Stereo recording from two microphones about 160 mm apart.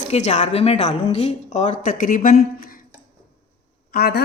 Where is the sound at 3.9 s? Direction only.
75° left (ahead or behind).